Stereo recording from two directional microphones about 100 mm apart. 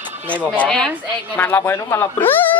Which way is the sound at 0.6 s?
5° left (ahead or behind).